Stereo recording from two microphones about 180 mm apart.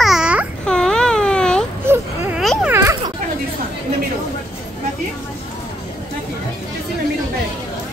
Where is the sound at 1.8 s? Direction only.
10° right (ahead or behind).